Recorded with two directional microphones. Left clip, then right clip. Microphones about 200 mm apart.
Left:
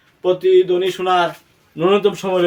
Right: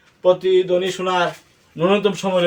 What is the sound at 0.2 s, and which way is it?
A man's voice, 20° left (ahead or behind).